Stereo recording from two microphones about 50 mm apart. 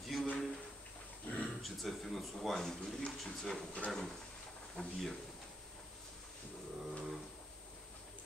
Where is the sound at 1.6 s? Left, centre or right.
Centre.